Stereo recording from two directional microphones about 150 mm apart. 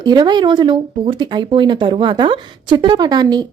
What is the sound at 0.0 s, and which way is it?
Speech, 30° right (ahead or behind).